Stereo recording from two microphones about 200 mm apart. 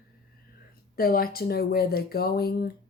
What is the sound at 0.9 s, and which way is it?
Speech, 50° left (ahead or behind).